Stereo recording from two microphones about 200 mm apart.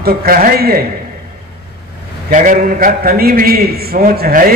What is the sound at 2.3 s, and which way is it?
A man's voice, 40° right (ahead or behind).